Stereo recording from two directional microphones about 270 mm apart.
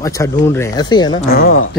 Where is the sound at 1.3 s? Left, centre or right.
Left.